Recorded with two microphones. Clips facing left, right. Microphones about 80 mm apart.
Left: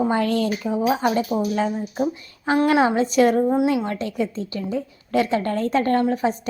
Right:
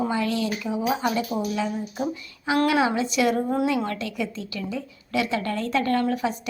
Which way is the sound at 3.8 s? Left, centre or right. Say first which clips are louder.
Left 3 dB; left.